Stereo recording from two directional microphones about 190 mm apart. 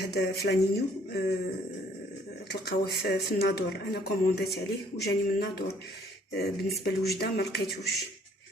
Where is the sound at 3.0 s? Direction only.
60° left (ahead or behind).